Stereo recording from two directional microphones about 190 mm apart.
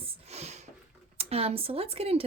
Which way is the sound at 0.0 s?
35° right (ahead or behind).